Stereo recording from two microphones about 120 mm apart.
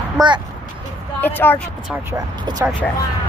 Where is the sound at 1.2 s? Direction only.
15° left (ahead or behind).